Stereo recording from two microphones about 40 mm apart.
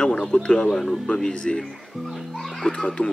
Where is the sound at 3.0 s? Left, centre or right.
Left.